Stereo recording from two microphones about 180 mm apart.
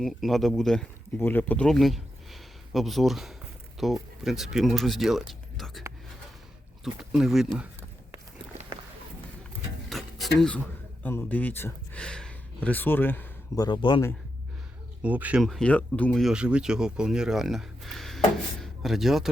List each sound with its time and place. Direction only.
0.0 s speech: centre (ahead or behind)
5.3 s a sound: centre (ahead or behind)
6.8 s speech: 5° right (ahead or behind)
9.9 s a sound: centre (ahead or behind)
11.0 s speech: 10° left (ahead or behind)
13.7 s speech: 25° left (ahead or behind)
15.0 s speech: 10° right (ahead or behind)